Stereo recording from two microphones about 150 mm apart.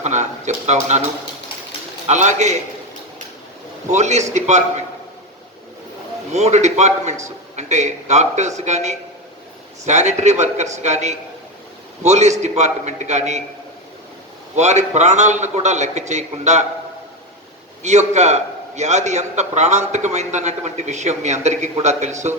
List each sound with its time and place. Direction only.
0.0 s speech: 50° right (ahead or behind)
2.0 s a man's voice: 50° right (ahead or behind)
3.8 s a man's voice: 50° right (ahead or behind)
6.3 s a man's voice: 50° right (ahead or behind)
14.5 s a man's voice: 50° right (ahead or behind)
17.8 s a man's voice: 50° right (ahead or behind)